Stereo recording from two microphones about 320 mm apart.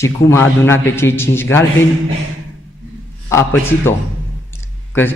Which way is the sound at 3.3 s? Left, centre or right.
Centre.